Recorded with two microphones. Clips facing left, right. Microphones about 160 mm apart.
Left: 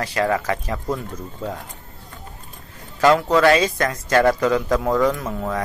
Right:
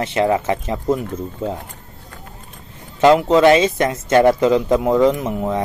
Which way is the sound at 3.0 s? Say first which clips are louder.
Right 4 dB; 20° right (ahead or behind).